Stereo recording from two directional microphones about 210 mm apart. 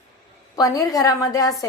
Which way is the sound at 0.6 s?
15° left (ahead or behind).